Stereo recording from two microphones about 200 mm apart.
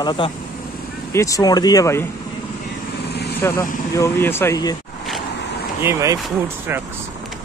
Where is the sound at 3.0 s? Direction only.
55° left (ahead or behind).